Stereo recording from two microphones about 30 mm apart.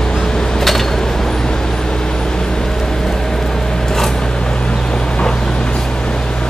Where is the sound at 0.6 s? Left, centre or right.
Centre.